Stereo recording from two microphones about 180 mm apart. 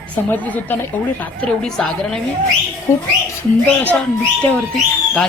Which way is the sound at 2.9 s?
15° left (ahead or behind).